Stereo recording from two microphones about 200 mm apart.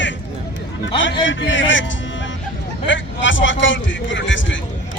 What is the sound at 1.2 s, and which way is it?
Speech, 70° left (ahead or behind).